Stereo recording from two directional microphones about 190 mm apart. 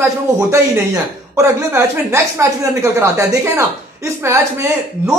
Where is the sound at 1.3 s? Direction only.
15° right (ahead or behind).